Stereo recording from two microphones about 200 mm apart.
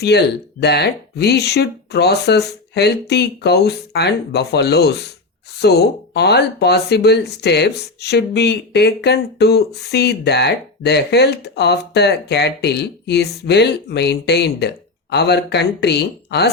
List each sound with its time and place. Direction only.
0.0 s speech: 55° left (ahead or behind)